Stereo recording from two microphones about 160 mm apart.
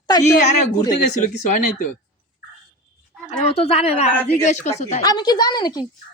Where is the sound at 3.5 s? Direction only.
40° left (ahead or behind).